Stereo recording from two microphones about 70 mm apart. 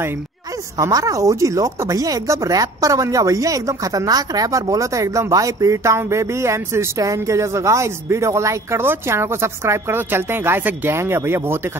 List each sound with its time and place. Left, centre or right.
0.7 s speech: right